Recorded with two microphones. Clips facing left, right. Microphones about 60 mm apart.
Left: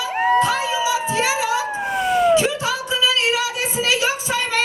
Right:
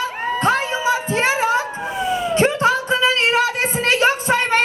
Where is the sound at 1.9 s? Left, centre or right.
Left.